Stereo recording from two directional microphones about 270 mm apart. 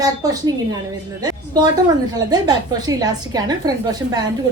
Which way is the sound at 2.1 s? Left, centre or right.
Centre.